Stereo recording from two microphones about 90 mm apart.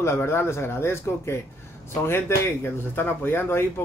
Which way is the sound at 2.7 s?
25° left (ahead or behind).